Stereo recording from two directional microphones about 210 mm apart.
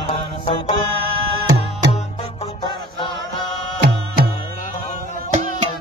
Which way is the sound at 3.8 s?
50° right (ahead or behind).